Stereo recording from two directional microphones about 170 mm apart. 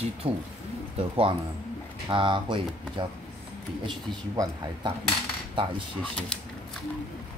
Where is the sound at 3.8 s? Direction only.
25° right (ahead or behind).